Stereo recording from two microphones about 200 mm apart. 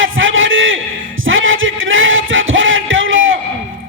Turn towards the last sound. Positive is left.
turn(degrees=-75)  # may be behind; listen again after turning